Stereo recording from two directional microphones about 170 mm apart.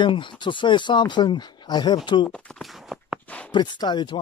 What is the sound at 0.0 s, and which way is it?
Speech, 30° left (ahead or behind).